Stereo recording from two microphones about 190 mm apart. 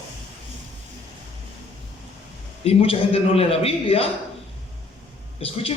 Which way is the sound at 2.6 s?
30° left (ahead or behind).